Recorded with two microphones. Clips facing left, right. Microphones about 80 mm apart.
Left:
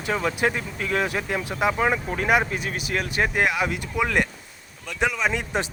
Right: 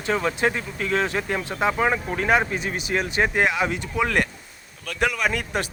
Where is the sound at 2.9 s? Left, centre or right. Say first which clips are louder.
Right 2 dB; centre.